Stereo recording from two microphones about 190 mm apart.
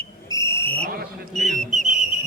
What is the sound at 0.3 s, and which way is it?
Vehicle, 15° left (ahead or behind).